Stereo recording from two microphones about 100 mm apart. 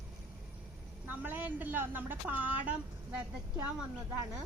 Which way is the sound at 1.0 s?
15° right (ahead or behind).